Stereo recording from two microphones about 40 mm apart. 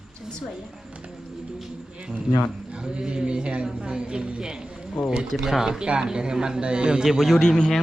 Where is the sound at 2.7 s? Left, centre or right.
Right.